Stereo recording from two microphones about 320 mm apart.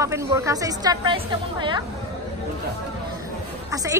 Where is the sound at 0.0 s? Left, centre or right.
Centre.